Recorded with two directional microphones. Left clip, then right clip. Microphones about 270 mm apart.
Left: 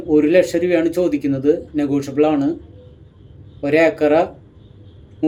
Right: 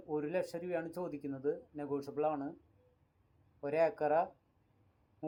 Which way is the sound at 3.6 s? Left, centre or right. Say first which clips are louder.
Left 18 dB; centre.